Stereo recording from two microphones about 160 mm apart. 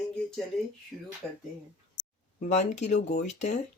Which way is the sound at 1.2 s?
10° left (ahead or behind).